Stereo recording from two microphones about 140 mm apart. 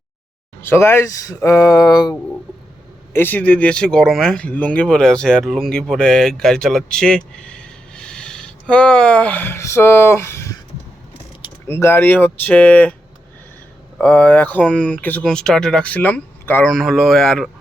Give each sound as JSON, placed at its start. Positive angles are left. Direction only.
{"t": 0.6, "sound": "speech", "side_deg": 15}
{"t": 3.1, "sound": "speech", "side_deg": 15}
{"t": 11.7, "sound": "speech", "side_deg": 15}
{"t": 14.0, "sound": "speech", "side_deg": 10}
{"t": 16.6, "sound": "speech", "side_deg": 0}